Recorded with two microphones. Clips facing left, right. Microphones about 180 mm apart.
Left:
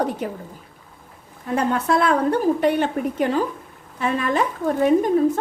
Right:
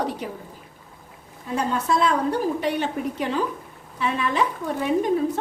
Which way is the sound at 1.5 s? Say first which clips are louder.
Left 3 dB; 60° left (ahead or behind).